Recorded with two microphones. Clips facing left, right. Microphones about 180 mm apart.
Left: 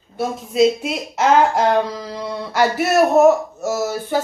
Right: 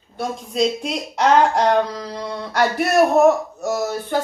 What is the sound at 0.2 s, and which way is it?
Speech, 5° left (ahead or behind).